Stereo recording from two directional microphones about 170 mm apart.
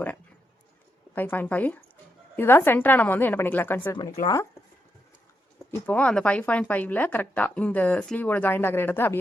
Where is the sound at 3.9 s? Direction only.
25° left (ahead or behind).